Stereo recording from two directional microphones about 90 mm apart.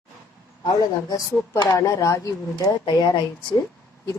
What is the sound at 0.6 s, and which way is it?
A woman's voice, 40° left (ahead or behind).